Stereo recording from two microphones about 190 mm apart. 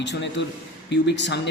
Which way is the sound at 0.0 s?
70° left (ahead or behind).